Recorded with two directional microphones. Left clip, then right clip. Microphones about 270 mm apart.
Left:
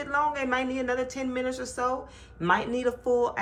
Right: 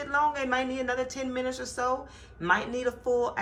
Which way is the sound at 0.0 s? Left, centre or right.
Centre.